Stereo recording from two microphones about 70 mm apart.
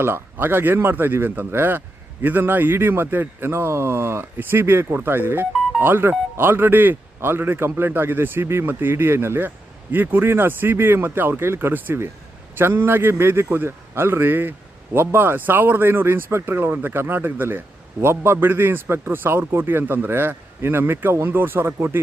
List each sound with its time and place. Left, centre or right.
0.0 s a man's voice: right